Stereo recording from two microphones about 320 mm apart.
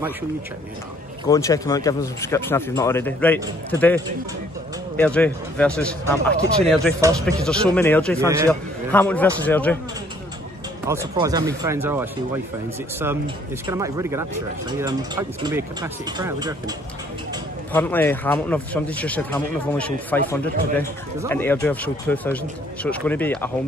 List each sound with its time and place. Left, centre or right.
1.2 s speech: centre
7.0 s speech: centre
7.7 s speech: centre
8.2 s speech: centre
8.5 s speech: centre
10.9 s speech: centre
13.7 s speech: centre
17.7 s speech: centre